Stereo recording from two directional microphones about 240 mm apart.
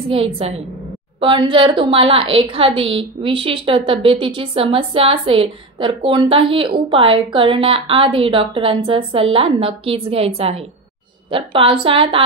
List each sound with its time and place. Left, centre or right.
0.1 s a woman's voice: right